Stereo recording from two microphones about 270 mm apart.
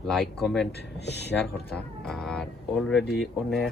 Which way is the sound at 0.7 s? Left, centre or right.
Left.